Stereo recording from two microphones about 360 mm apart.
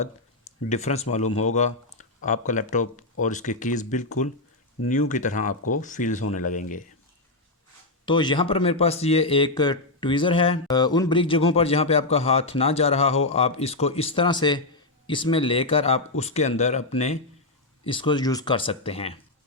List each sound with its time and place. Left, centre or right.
0.7 s speech: centre
8.0 s speech: centre